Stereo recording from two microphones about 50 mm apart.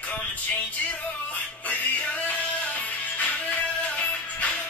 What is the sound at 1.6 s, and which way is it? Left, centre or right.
Music, left.